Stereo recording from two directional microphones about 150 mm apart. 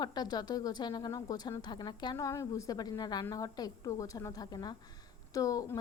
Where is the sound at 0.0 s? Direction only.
25° left (ahead or behind).